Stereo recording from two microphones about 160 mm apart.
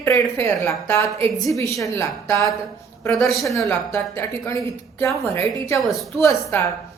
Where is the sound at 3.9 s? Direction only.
15° left (ahead or behind).